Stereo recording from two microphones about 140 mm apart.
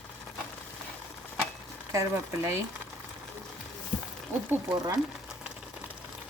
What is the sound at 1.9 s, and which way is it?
Speech, 20° right (ahead or behind).